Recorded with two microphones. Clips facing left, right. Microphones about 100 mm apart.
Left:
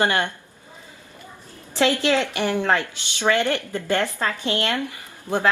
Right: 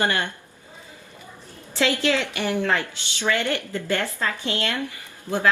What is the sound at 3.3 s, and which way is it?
A woman's voice, 20° left (ahead or behind).